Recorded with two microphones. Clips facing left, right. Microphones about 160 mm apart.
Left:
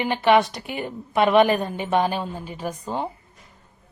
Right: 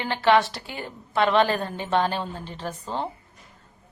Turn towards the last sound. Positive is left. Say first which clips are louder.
# left 2 dB
turn(degrees=10)  # may be behind; listen again after turning